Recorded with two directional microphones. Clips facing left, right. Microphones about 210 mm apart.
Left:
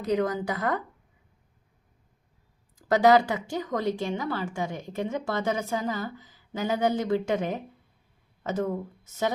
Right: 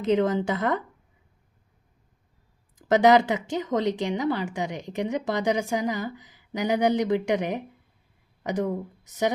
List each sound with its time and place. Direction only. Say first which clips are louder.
0.0 s speech: right 4 dB; 25° right (ahead or behind)
2.7 s speech: right 2 dB; 20° right (ahead or behind)